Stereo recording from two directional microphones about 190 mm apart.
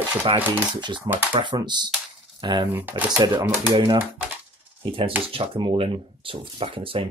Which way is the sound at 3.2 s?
20° right (ahead or behind).